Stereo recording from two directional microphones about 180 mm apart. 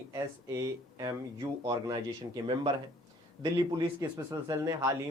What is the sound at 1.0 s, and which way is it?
Speech, 20° right (ahead or behind).